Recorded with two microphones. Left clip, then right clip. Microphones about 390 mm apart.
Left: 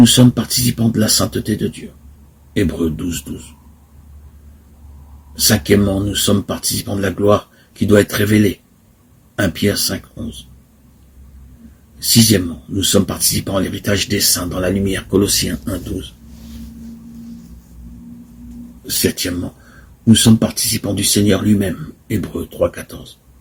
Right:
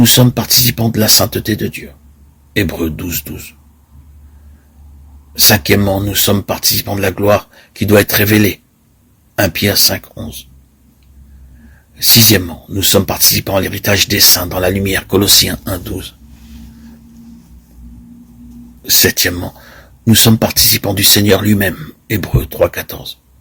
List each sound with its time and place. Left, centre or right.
0.0 s speech: right
5.3 s speech: right
11.9 s speech: right
19.1 s speech: right